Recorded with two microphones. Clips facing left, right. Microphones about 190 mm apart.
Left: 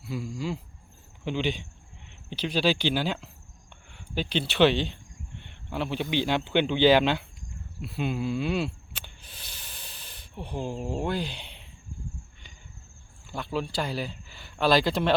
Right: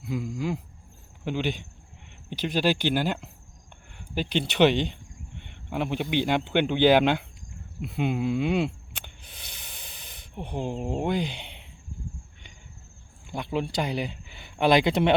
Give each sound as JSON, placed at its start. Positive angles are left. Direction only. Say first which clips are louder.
{"t": 0.0, "sound": "a sound", "louder": "right 3 dB", "side_deg": -20}
{"t": 1.2, "sound": "speech", "louder": "even", "side_deg": -10}
{"t": 6.2, "sound": "speech", "louder": "even", "side_deg": -10}
{"t": 9.2, "sound": "snake", "louder": "right 1 dB", "side_deg": -15}
{"t": 11.3, "sound": "a sound", "louder": "right 2 dB", "side_deg": -65}
{"t": 13.3, "sound": "speech", "louder": "right 2 dB", "side_deg": -20}